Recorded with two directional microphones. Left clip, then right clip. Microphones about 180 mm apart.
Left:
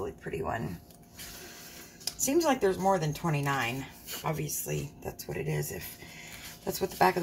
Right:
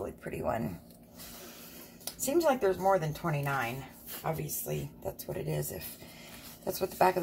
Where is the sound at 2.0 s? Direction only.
15° right (ahead or behind).